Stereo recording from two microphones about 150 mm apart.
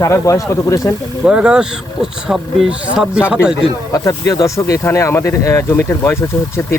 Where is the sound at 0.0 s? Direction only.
20° left (ahead or behind).